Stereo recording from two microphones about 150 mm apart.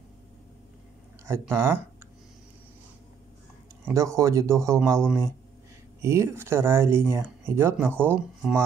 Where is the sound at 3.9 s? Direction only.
20° right (ahead or behind).